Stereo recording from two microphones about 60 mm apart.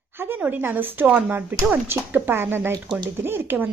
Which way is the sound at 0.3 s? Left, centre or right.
Right.